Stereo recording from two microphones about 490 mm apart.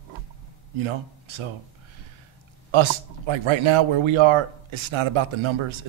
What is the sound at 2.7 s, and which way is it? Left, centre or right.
Speech, right.